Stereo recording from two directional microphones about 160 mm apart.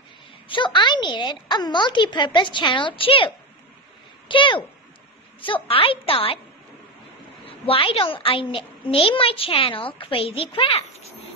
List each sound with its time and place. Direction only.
0.5 s a woman's voice: 30° left (ahead or behind)
7.6 s a child's voice: 35° left (ahead or behind)